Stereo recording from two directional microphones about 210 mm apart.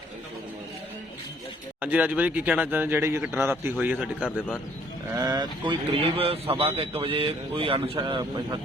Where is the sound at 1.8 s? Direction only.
5° right (ahead or behind).